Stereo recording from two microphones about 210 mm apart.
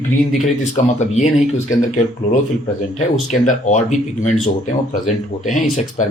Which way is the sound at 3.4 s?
35° left (ahead or behind).